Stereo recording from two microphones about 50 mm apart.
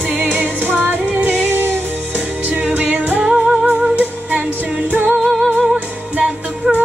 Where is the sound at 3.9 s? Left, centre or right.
Right.